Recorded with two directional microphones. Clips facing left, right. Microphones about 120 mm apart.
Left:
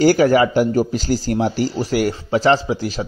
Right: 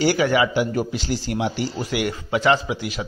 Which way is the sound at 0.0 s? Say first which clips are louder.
Left 6 dB; 40° left (ahead or behind).